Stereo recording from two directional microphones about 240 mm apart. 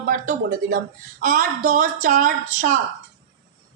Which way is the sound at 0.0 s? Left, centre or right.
Right.